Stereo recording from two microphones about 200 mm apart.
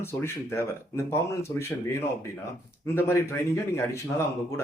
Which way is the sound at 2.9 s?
10° left (ahead or behind).